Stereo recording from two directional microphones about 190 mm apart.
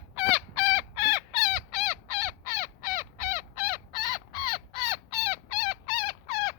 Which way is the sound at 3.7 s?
20° right (ahead or behind).